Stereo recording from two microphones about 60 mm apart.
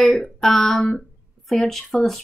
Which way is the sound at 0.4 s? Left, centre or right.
Centre.